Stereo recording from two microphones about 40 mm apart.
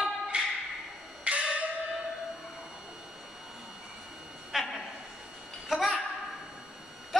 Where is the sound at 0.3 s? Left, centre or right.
Right.